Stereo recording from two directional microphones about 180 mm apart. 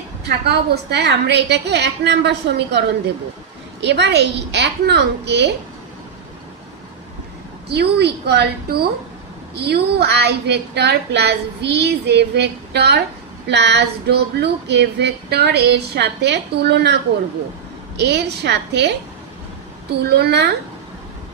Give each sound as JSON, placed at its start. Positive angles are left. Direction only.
{"t": 0.2, "sound": "speech", "side_deg": -60}
{"t": 3.8, "sound": "speech", "side_deg": -70}
{"t": 7.6, "sound": "speech", "side_deg": -65}